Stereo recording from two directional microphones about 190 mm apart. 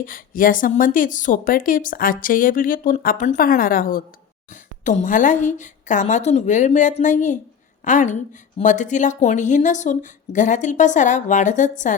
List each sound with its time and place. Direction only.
0.0 s a woman's voice: 45° left (ahead or behind)